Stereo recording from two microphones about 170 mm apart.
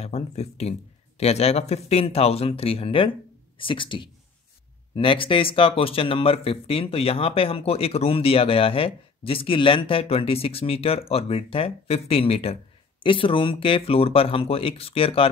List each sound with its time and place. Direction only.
0.0 s speech: 40° left (ahead or behind)